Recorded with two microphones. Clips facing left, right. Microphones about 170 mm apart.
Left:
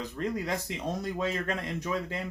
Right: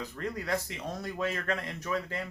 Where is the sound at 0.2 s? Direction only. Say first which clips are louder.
Left 1 dB; 20° left (ahead or behind).